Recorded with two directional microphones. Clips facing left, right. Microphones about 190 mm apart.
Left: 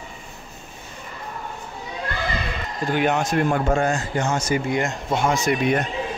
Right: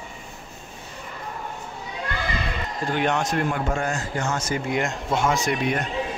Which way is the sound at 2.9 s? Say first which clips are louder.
Left 3 dB; 5° left (ahead or behind).